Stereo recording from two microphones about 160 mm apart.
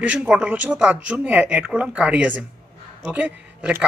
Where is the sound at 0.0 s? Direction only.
10° right (ahead or behind).